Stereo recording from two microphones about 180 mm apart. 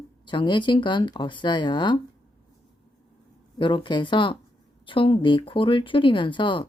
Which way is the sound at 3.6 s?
25° left (ahead or behind).